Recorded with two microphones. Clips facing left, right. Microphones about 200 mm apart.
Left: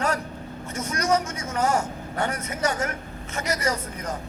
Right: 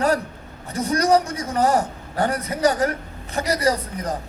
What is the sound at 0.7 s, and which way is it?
A man's voice, 35° right (ahead or behind).